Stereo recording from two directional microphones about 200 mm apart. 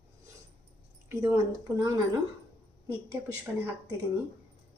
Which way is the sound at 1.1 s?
15° right (ahead or behind).